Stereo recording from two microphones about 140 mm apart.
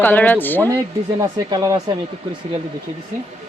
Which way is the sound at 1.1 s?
25° right (ahead or behind).